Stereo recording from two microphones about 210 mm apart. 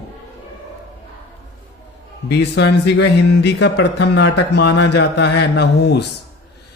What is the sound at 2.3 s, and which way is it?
Speech, 55° left (ahead or behind).